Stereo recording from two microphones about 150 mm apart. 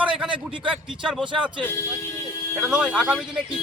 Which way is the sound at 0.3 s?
35° right (ahead or behind).